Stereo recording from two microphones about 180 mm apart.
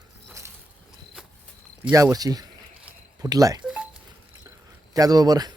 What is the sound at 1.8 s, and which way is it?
Speech, 15° right (ahead or behind).